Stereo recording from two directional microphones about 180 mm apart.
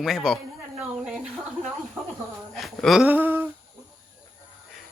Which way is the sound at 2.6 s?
Centre (ahead or behind).